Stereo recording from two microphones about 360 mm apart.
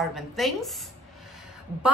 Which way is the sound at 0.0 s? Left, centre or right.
Centre.